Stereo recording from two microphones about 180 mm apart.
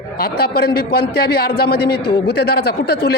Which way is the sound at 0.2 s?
60° left (ahead or behind).